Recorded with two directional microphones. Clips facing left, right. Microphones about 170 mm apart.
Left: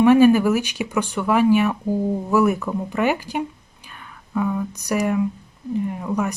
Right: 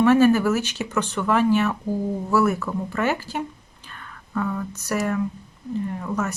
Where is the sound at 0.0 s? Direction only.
15° left (ahead or behind).